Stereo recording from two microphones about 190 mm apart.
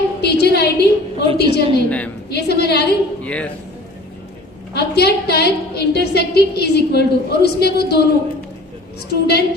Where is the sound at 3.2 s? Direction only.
5° left (ahead or behind).